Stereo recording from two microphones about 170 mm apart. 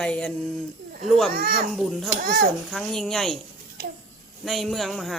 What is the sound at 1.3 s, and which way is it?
Speech, 60° right (ahead or behind).